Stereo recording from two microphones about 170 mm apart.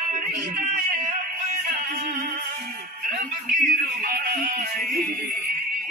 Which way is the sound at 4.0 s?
55° right (ahead or behind).